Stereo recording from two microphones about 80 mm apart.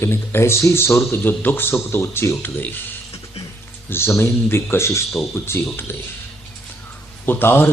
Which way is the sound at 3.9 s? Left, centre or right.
Left.